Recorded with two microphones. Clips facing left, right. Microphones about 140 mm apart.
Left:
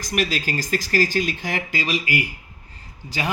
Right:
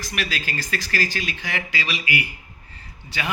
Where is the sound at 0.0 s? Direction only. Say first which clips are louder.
Left 5 dB; 45° left (ahead or behind).